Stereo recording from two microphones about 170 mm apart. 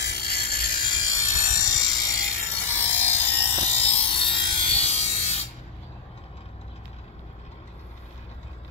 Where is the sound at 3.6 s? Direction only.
35° left (ahead or behind).